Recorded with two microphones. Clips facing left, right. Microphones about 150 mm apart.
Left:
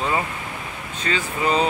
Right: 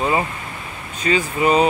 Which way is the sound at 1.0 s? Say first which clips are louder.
Right 5 dB; 15° right (ahead or behind).